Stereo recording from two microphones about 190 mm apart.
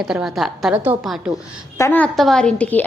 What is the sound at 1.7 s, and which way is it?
A woman's voice, 10° left (ahead or behind).